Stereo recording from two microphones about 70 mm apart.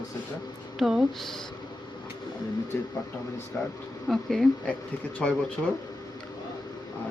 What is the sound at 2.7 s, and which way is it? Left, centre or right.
Speech, left.